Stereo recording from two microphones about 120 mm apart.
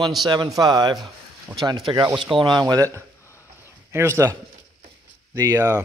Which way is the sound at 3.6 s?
20° right (ahead or behind).